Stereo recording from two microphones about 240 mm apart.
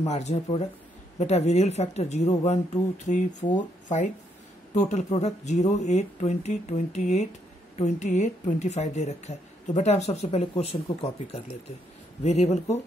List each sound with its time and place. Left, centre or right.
0.0 s speech: left